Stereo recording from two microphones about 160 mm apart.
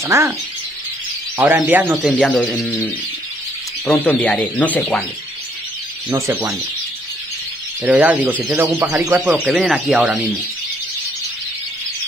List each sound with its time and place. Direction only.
0.0 s speech: 20° right (ahead or behind)
1.4 s speech: 10° right (ahead or behind)
2.0 s speech: centre (ahead or behind)
6.0 s speech: 15° right (ahead or behind)
7.8 s speech: 10° right (ahead or behind)